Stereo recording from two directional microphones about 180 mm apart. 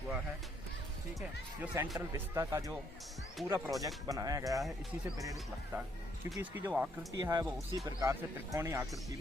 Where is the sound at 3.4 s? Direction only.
Centre (ahead or behind).